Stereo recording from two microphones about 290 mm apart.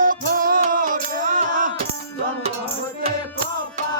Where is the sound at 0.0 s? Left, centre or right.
Right.